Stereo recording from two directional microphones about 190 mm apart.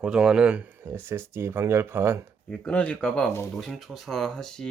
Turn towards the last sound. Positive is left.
turn(degrees=5)  # may be behind; listen again after turning